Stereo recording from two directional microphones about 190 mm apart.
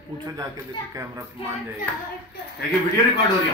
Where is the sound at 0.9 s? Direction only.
15° right (ahead or behind).